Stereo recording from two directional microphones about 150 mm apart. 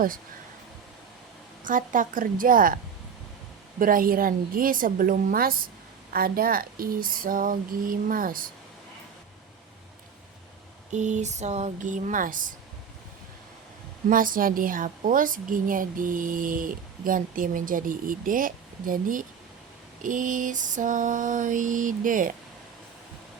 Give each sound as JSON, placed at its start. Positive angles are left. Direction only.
{"t": 1.6, "sound": "speech", "side_deg": -60}
{"t": 3.8, "sound": "speech", "side_deg": -70}
{"t": 10.9, "sound": "speech", "side_deg": -50}
{"t": 14.1, "sound": "a woman's voice", "side_deg": -65}